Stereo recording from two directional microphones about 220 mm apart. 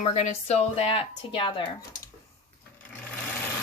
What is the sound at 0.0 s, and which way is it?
Speech, 30° left (ahead or behind).